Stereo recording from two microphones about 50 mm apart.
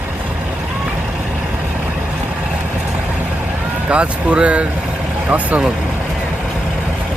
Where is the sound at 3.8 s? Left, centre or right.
Right.